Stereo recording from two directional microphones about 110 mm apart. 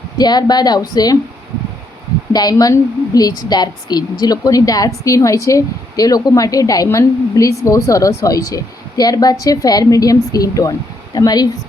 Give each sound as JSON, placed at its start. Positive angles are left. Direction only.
{"t": 0.2, "sound": "speech", "side_deg": 40}
{"t": 2.3, "sound": "speech", "side_deg": 35}